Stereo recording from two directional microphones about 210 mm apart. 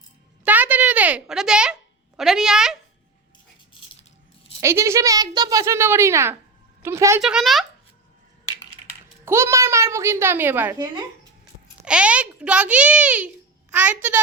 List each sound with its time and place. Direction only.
0.4 s a sound: 10° right (ahead or behind)
4.6 s a child's voice: 15° right (ahead or behind)
7.2 s speech: 5° right (ahead or behind)
9.2 s a child's voice: 10° right (ahead or behind)